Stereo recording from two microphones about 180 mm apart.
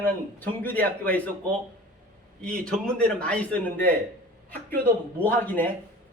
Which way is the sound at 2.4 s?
5° left (ahead or behind).